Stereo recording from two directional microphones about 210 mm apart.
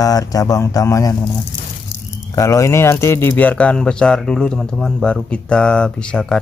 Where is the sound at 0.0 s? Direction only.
15° left (ahead or behind).